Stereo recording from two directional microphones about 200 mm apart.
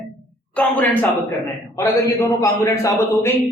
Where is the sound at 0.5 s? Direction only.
5° left (ahead or behind).